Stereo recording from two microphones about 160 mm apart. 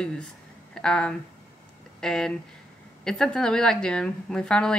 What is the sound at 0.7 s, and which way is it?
A woman's voice, 5° left (ahead or behind).